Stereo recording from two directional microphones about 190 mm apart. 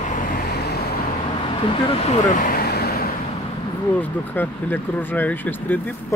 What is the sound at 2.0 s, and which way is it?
Vehicle, 45° left (ahead or behind).